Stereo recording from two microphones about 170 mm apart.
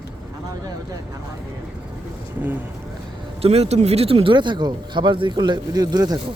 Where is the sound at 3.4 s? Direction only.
35° right (ahead or behind).